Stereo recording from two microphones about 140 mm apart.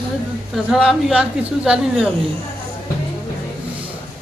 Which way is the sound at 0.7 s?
Centre (ahead or behind).